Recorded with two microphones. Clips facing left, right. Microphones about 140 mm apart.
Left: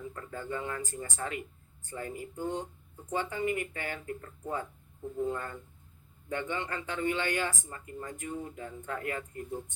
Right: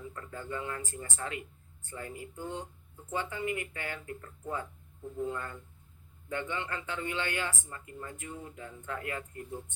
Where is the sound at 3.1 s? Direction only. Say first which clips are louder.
Left 3 dB; 40° left (ahead or behind).